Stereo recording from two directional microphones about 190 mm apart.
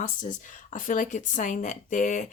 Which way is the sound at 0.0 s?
45° left (ahead or behind).